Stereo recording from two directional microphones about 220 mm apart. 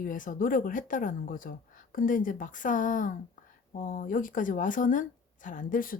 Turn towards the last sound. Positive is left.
turn(degrees=40)  # may be behind; listen again after turning